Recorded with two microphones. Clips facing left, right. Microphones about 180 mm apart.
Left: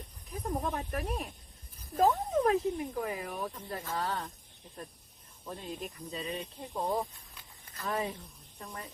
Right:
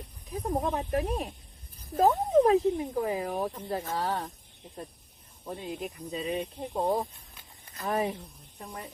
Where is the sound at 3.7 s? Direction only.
20° right (ahead or behind).